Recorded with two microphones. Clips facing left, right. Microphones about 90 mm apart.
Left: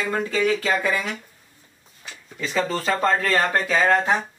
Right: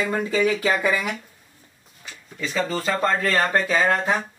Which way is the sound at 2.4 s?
Centre (ahead or behind).